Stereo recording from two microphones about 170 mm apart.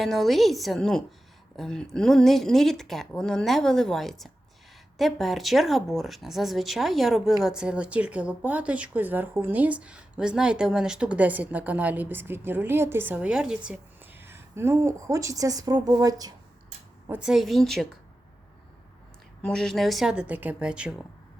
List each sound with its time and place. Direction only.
0.0 s a woman's voice: centre (ahead or behind); by 16.3 s 20° right (ahead or behind)
17.1 s speech: 5° right (ahead or behind)
19.4 s speech: 5° left (ahead or behind)